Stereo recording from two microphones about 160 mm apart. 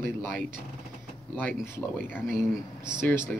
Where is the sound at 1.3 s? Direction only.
10° left (ahead or behind).